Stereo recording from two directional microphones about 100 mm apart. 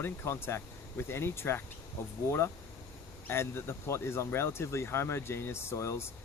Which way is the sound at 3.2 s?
25° left (ahead or behind).